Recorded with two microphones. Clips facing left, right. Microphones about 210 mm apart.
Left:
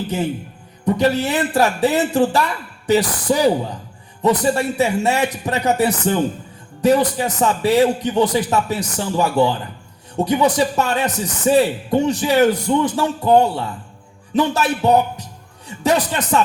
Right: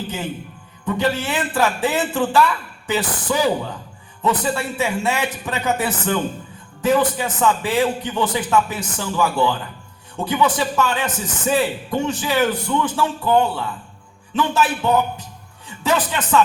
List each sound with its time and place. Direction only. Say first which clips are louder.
0.9 s a man's voice: left 4 dB; 40° left (ahead or behind)